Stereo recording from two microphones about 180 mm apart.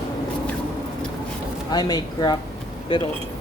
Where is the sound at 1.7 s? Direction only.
20° left (ahead or behind).